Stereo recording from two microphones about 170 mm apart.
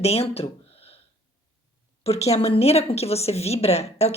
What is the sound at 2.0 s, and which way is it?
Speech, 40° left (ahead or behind).